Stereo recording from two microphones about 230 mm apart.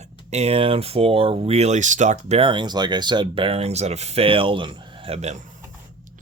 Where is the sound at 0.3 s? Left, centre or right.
Right.